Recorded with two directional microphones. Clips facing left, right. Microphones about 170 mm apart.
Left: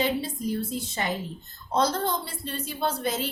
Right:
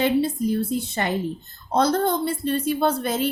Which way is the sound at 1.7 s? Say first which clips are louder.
Right 5 dB; 60° right (ahead or behind).